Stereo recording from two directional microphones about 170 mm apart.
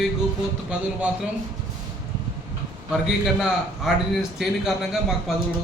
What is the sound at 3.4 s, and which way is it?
A man's voice, 5° right (ahead or behind).